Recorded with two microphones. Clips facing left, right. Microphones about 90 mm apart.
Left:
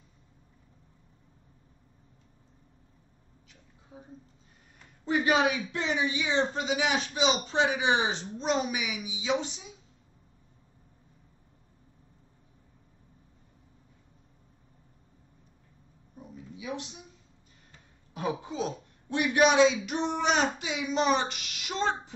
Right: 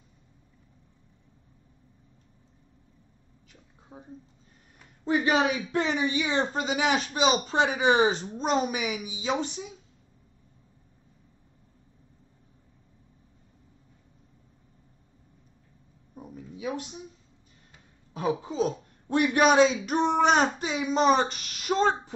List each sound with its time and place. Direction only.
3.9 s a woman's voice: 35° right (ahead or behind)
5.9 s speech: 50° right (ahead or behind)
16.2 s a sound: 40° right (ahead or behind)
18.1 s a woman's voice: 30° right (ahead or behind)